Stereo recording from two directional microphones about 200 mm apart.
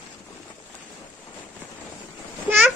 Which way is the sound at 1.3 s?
10° left (ahead or behind).